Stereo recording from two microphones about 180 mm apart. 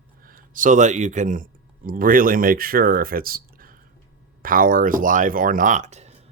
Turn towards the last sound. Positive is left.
turn(degrees=-40)  # may be behind; listen again after turning